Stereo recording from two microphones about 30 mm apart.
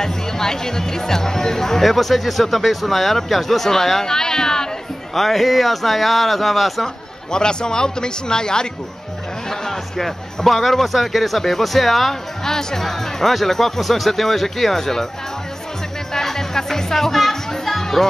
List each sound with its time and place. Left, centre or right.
0.0 s speech: centre
5.1 s a man's voice: centre
7.3 s speech: left
9.5 s a man's voice: centre
12.4 s speech: centre
16.1 s music: centre